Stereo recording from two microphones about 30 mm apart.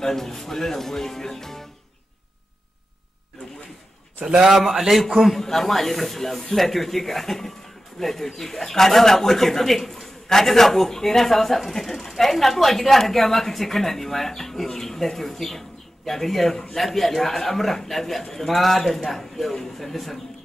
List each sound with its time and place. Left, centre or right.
0.0 s a woman's voice: centre
4.2 s a man's voice: right
4.6 s a man's voice: centre
5.3 s a woman's voice: centre